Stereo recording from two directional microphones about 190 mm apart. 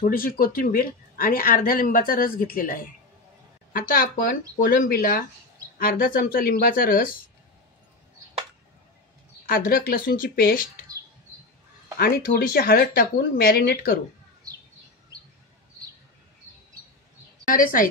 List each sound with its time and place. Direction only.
0.0 s speech: 50° left (ahead or behind)
9.5 s speech: 50° left (ahead or behind)
12.0 s speech: 50° left (ahead or behind)
17.5 s speech: 45° left (ahead or behind)